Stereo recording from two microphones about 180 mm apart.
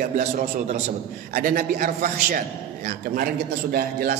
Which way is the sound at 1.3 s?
55° right (ahead or behind).